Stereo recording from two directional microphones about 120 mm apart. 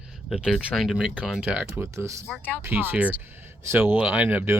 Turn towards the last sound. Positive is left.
turn(degrees=-15)  # may be behind; listen again after turning